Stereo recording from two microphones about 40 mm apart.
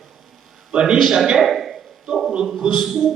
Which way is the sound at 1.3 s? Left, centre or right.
Centre.